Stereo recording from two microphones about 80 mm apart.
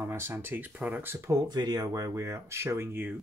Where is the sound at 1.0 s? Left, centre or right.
Right.